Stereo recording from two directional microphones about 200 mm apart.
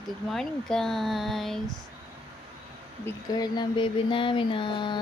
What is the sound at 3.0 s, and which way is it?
Speech, 20° left (ahead or behind).